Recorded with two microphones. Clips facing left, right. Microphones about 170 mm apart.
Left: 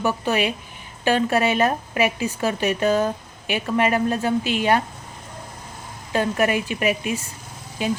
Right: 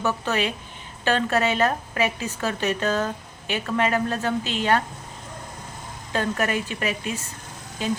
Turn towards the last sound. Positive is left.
turn(degrees=15)  # may be behind; listen again after turning